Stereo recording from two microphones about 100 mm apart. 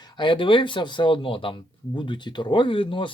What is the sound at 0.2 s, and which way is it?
A man's voice, 55° left (ahead or behind).